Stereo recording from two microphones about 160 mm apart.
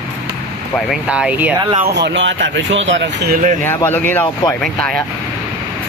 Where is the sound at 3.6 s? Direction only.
15° left (ahead or behind).